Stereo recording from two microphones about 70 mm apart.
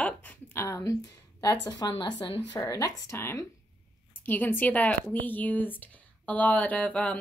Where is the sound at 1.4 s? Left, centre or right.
Left.